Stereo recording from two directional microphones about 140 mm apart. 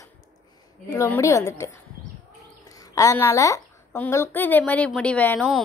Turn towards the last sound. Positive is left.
turn(degrees=10)  # may be behind; listen again after turning